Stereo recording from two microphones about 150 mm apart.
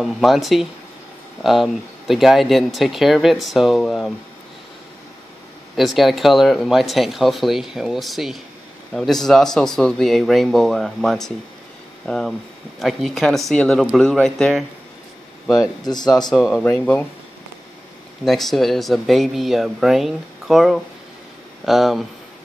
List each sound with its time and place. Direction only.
0.0 s speech: centre (ahead or behind)
5.8 s speech: centre (ahead or behind)
15.8 s speech: 25° left (ahead or behind)
16.3 s speech: centre (ahead or behind)
18.2 s speech: centre (ahead or behind)